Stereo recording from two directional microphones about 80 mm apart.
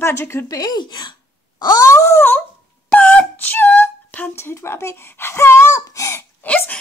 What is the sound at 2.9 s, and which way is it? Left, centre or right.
Wail, centre.